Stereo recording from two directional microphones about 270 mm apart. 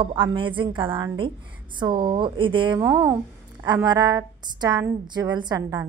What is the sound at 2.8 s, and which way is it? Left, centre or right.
A woman's voice, centre.